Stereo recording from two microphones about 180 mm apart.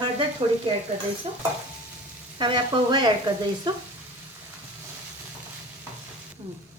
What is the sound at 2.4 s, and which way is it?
Sizzle, 25° right (ahead or behind).